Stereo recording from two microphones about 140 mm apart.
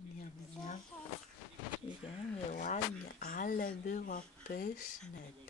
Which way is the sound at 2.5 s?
60° left (ahead or behind).